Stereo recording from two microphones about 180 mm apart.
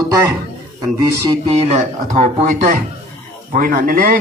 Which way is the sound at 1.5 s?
35° right (ahead or behind).